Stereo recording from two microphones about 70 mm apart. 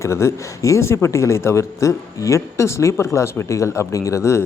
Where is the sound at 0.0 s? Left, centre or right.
Left.